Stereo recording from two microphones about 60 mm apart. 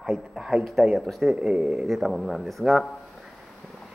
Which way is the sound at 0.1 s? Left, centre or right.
Centre.